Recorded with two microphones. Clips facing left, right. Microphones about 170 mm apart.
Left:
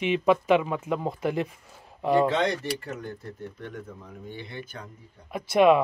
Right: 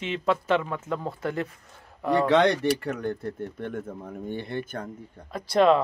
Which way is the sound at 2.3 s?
65° right (ahead or behind).